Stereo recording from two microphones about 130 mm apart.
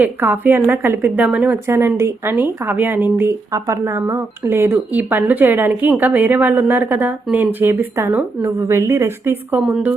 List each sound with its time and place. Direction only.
0.0 s a woman's voice: 15° right (ahead or behind)
7.6 s a woman's voice: 20° right (ahead or behind)